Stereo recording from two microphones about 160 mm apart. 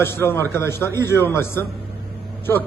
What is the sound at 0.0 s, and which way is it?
A man's voice, 15° left (ahead or behind).